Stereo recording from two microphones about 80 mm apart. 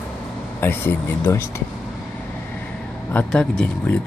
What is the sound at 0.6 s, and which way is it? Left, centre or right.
Speech, left.